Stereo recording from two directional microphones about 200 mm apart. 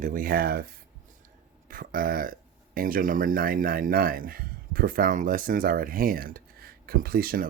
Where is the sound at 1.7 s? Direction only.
45° right (ahead or behind).